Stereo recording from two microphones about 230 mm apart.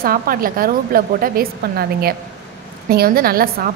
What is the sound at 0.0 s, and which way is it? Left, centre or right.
A woman's voice, right.